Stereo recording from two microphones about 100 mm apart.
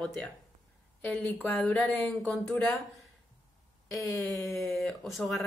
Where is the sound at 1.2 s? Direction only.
20° left (ahead or behind).